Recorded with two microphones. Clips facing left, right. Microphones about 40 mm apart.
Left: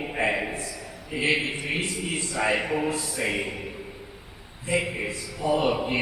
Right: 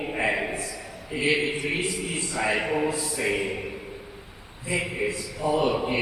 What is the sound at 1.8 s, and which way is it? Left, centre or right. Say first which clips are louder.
Speech: even; centre.